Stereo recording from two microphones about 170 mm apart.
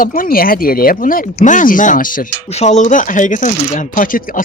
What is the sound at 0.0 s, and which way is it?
A man's voice, 55° left (ahead or behind).